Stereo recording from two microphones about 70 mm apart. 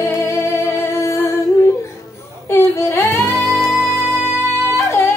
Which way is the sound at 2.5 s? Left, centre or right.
Left.